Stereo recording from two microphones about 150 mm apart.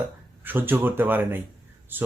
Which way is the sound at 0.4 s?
15° right (ahead or behind).